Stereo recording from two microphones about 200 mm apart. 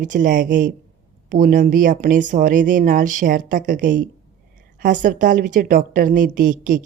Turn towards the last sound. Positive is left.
turn(degrees=-40)  # may be behind; listen again after turning